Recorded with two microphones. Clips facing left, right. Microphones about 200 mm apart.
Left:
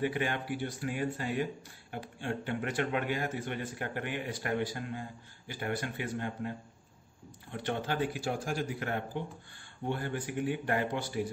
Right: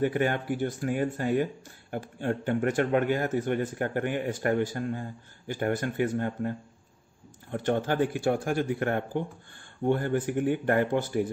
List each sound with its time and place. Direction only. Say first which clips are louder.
0.0 s speech: right 6 dB; 45° right (ahead or behind)
7.5 s speech: right 7 dB; 45° right (ahead or behind)